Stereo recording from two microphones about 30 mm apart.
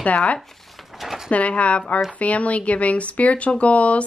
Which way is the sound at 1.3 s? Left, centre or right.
Left.